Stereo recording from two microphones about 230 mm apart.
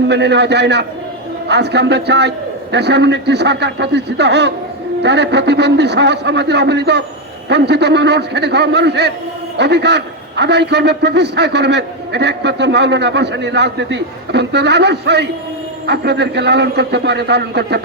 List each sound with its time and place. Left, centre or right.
0.1 s a man's voice: right